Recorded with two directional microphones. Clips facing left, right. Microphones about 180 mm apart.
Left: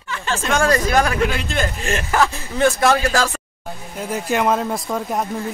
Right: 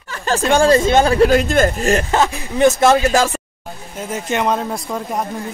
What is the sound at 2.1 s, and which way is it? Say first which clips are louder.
Speech: right 2 dB; 20° right (ahead or behind).